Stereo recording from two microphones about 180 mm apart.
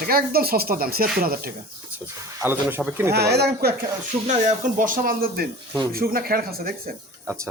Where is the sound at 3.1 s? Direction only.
65° right (ahead or behind).